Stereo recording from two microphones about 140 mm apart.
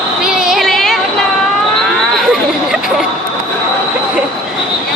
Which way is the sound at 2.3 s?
5° right (ahead or behind).